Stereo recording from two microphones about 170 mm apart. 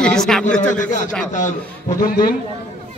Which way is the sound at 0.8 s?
50° left (ahead or behind).